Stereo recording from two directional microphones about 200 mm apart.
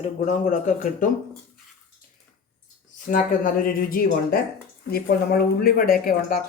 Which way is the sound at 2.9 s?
40° left (ahead or behind).